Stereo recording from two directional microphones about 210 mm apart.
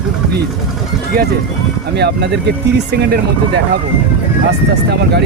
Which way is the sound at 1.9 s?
50° right (ahead or behind).